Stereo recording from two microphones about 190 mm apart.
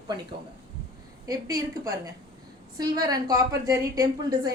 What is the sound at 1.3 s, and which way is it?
A woman's voice, 20° right (ahead or behind).